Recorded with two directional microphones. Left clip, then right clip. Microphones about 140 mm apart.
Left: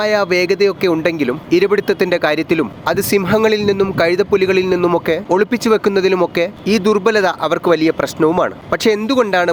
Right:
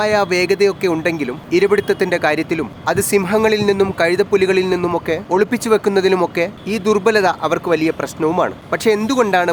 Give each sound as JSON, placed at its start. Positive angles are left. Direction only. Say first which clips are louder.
{"t": 0.0, "sound": "a man's voice", "louder": "left 1 dB", "side_deg": 20}
{"t": 5.0, "sound": "speech", "louder": "left 2 dB", "side_deg": 30}
{"t": 5.6, "sound": "speech", "louder": "left 1 dB", "side_deg": 20}